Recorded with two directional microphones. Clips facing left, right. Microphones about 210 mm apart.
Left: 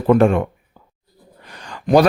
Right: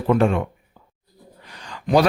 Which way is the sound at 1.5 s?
50° left (ahead or behind).